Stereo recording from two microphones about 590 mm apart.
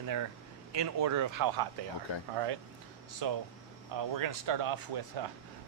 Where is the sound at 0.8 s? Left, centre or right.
Right.